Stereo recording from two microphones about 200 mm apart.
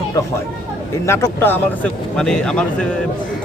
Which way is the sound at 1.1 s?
10° left (ahead or behind).